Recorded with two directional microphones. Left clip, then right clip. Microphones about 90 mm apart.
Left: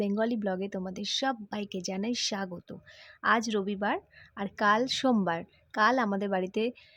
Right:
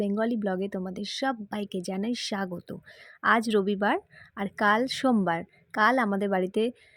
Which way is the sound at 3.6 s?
60° right (ahead or behind).